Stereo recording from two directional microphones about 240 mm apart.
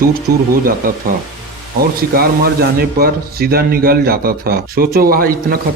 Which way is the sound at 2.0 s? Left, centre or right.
Right.